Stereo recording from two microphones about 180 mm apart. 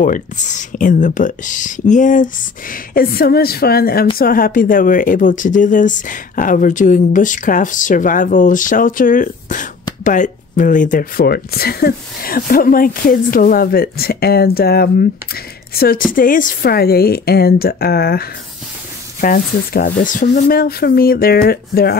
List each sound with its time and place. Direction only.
0.0 s speech: 45° left (ahead or behind)